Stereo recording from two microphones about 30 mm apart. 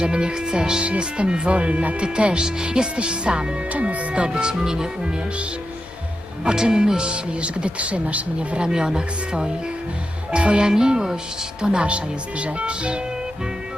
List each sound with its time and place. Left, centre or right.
0.0 s speech: right
0.8 s speech: right
2.0 s speech: right
3.7 s speech: right
4.3 s speech: right
6.4 s speech: right
8.4 s speech: right
8.7 s speech: right
10.7 s speech: right
11.9 s speech: right